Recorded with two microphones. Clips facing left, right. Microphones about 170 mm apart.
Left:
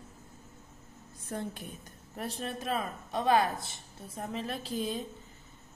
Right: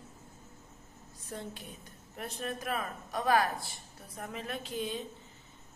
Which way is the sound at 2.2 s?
30° left (ahead or behind).